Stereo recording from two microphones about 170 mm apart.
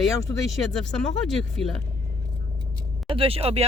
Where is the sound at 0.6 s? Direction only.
5° left (ahead or behind).